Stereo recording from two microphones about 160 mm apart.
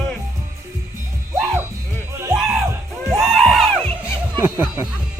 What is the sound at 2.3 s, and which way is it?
Music, 5° right (ahead or behind).